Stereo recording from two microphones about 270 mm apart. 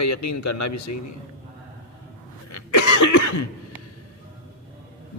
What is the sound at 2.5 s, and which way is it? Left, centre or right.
Cough, left.